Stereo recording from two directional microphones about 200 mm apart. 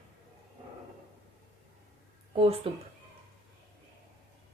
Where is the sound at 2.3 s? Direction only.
30° right (ahead or behind).